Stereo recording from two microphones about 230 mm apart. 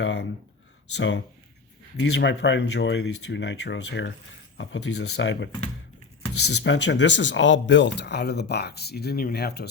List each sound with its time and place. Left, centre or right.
0.0 s a sound: left
0.9 s speech: left
6.6 s speech: left